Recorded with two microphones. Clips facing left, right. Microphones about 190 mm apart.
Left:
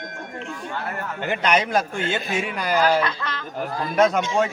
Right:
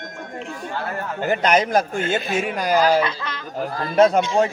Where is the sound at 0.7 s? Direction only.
35° right (ahead or behind).